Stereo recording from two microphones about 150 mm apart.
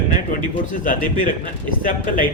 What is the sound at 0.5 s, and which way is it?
Speech, 60° left (ahead or behind).